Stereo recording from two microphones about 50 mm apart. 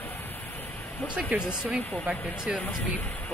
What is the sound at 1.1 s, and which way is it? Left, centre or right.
Speech, right.